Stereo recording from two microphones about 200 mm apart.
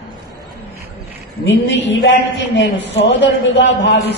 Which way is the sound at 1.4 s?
65° left (ahead or behind).